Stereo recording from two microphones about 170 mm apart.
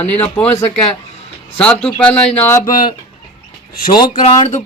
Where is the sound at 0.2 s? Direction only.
10° left (ahead or behind).